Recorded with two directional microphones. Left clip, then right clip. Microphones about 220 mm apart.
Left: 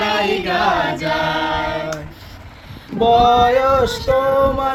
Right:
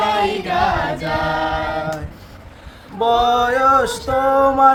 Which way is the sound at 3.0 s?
15° right (ahead or behind).